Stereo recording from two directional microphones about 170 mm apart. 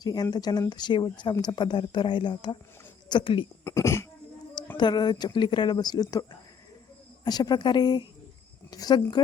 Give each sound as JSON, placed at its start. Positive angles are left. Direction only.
{"t": 0.0, "sound": "speech", "side_deg": 25}
{"t": 3.6, "sound": "speech", "side_deg": 15}
{"t": 7.3, "sound": "speech", "side_deg": 25}